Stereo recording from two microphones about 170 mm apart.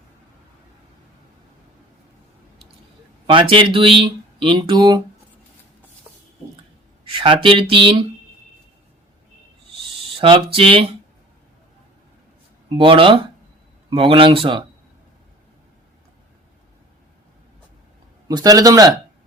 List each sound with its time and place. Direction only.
3.2 s speech: 30° right (ahead or behind)
7.0 s speech: 30° right (ahead or behind)
10.2 s speech: 30° right (ahead or behind)
12.6 s speech: 30° right (ahead or behind)
18.3 s speech: 20° right (ahead or behind)